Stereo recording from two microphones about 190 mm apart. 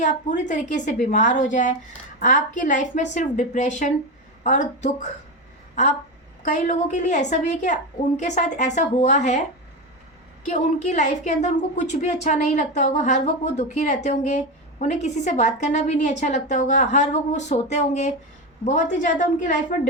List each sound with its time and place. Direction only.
0.0 s a woman's voice: 40° left (ahead or behind)
6.4 s a woman's voice: 40° left (ahead or behind)
10.4 s a woman's voice: 40° left (ahead or behind)